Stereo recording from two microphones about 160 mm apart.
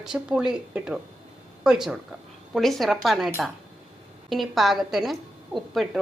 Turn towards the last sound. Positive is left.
turn(degrees=0)  # may be behind; listen again after turning